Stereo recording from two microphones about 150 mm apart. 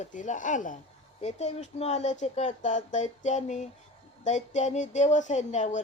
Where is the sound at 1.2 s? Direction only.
45° left (ahead or behind).